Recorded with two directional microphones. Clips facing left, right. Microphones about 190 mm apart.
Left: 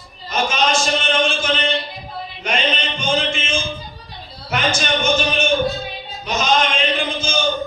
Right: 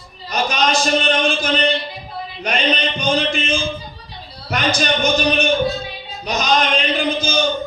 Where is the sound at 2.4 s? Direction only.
35° right (ahead or behind).